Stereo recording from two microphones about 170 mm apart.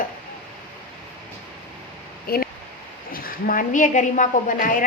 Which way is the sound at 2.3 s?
65° left (ahead or behind).